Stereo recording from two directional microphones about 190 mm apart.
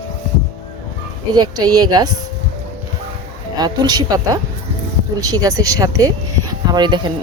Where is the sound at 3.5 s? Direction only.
20° right (ahead or behind).